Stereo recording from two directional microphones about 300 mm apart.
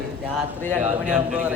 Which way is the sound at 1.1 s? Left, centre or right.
Centre.